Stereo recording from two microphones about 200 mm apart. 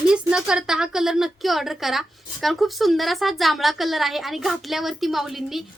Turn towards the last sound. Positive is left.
turn(degrees=0)  # may be behind; listen again after turning